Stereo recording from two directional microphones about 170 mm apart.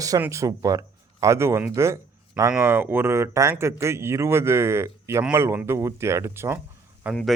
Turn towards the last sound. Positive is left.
turn(degrees=-10)  # may be behind; listen again after turning